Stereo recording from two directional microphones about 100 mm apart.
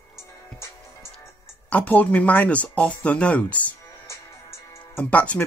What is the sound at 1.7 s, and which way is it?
Speech, 15° left (ahead or behind).